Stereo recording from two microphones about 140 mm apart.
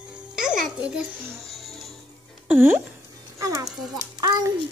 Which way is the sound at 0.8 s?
5° right (ahead or behind).